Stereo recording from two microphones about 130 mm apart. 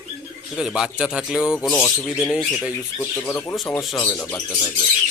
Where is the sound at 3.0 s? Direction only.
20° left (ahead or behind).